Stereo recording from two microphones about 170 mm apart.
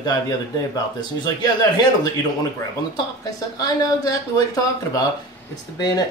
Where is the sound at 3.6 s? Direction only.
20° left (ahead or behind).